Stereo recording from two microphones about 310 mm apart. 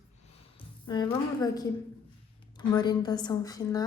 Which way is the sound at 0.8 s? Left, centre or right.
Centre.